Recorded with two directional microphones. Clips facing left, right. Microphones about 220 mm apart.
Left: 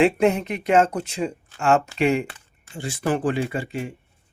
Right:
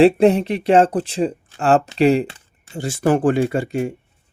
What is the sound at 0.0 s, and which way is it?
Speech, 35° right (ahead or behind).